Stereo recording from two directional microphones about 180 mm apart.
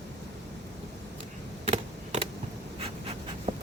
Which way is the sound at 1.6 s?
35° right (ahead or behind).